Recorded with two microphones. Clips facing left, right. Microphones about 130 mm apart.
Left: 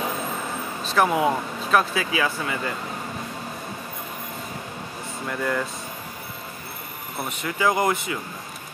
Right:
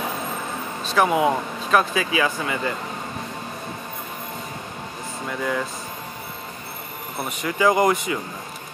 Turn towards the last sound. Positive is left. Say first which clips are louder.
# right 4 dB
turn(degrees=-20)  # may be behind; listen again after turning